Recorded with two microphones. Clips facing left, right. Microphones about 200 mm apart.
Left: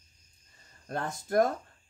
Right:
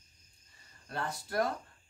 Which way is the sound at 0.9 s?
45° left (ahead or behind).